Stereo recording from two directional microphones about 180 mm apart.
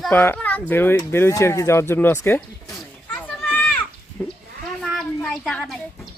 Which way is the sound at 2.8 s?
5° left (ahead or behind).